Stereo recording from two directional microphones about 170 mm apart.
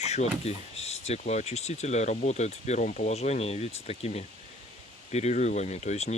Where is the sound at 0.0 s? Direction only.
40° left (ahead or behind).